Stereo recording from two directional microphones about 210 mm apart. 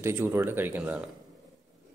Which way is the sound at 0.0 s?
10° right (ahead or behind).